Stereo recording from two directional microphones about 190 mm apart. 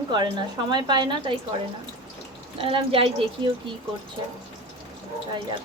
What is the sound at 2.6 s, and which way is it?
Speech, 30° right (ahead or behind).